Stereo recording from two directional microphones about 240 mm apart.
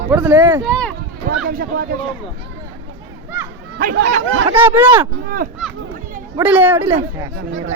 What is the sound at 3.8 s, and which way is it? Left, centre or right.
Speech, right.